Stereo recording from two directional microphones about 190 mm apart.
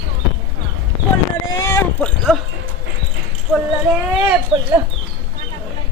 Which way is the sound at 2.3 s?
Centre (ahead or behind).